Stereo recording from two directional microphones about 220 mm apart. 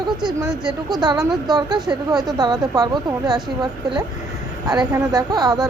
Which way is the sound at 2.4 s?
15° right (ahead or behind).